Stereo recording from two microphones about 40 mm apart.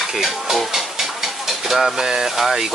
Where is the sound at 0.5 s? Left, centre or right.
Centre.